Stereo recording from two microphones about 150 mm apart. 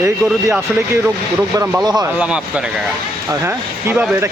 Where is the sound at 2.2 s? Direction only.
5° right (ahead or behind).